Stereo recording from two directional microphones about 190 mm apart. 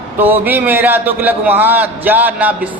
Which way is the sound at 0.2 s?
10° right (ahead or behind).